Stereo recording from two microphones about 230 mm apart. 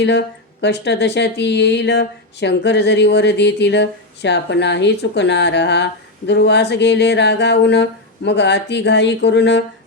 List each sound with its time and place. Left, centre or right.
0.0 s speech: left